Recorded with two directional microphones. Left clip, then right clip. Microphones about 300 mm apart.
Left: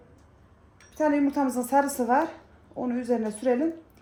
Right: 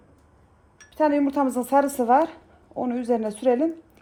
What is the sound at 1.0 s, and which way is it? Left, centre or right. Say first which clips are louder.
Speech: right 3 dB; centre.